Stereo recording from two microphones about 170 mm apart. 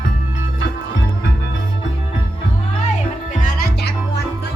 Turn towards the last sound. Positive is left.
turn(degrees=65)  # may be behind; listen again after turning